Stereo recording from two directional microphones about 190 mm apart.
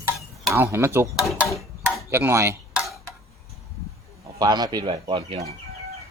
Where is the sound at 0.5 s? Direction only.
15° right (ahead or behind).